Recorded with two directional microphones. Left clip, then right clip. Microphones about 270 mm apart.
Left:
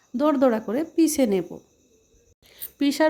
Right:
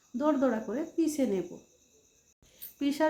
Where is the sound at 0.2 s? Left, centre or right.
Left.